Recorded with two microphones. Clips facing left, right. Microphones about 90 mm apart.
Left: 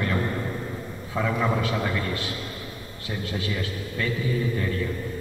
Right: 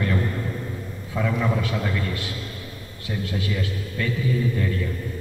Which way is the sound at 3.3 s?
5° left (ahead or behind).